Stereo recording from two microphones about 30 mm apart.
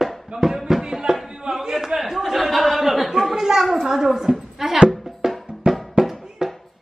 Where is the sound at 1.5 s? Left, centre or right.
Centre.